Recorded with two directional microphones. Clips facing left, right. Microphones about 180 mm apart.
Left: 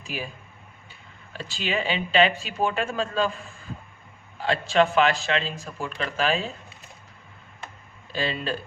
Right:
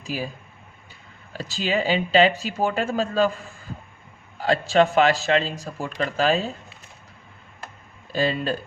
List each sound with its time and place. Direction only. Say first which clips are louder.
1.3 s speech: right 4 dB; 40° right (ahead or behind)
4.4 s speech: right 3 dB; 40° right (ahead or behind)
8.1 s speech: right 5 dB; 45° right (ahead or behind)